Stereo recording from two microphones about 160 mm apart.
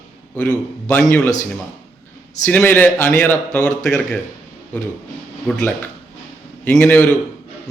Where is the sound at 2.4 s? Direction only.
10° left (ahead or behind).